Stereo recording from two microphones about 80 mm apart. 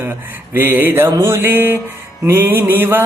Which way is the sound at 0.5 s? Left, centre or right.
Right.